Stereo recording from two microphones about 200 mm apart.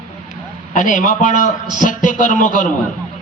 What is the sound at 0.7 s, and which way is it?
A man's voice, 40° left (ahead or behind).